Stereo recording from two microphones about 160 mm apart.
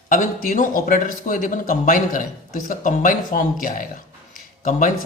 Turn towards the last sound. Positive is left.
turn(degrees=55)  # may be behind; listen again after turning